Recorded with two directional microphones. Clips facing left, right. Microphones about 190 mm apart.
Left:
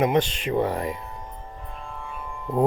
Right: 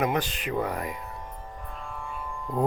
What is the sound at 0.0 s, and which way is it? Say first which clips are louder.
Speech: left 5 dB; 20° left (ahead or behind).